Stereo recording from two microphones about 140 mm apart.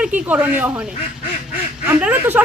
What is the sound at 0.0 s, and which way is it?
Speech, 10° right (ahead or behind).